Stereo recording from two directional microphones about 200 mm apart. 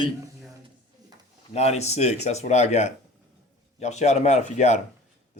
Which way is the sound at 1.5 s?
30° left (ahead or behind).